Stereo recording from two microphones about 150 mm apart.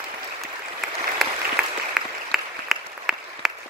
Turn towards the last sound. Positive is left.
turn(degrees=0)  # may be behind; listen again after turning